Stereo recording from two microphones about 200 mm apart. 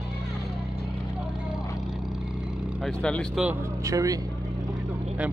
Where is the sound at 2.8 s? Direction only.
5° left (ahead or behind).